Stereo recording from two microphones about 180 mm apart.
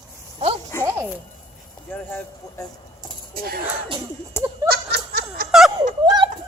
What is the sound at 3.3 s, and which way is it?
Speech, 55° right (ahead or behind).